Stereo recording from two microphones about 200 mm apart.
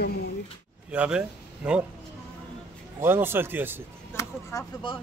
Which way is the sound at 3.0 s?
10° right (ahead or behind).